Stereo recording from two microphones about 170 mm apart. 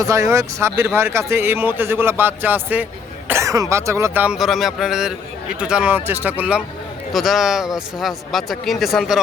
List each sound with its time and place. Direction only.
0.0 s speech: 20° right (ahead or behind); by 9.2 s centre (ahead or behind)